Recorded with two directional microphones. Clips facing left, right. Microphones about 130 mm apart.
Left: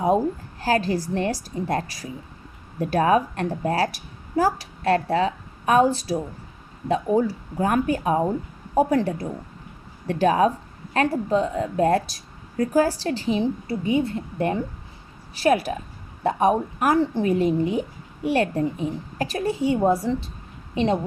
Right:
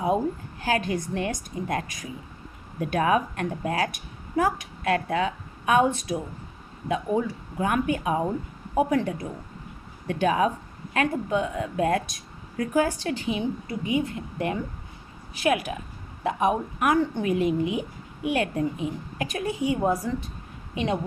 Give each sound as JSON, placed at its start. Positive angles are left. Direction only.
{"t": 0.6, "sound": "a woman's voice", "side_deg": 35}